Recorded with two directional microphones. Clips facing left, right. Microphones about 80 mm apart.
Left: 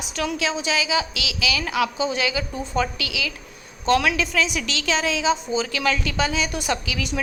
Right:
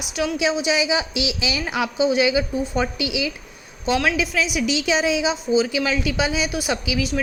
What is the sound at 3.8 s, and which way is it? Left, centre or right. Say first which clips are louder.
A woman's voice: left 1 dB; centre.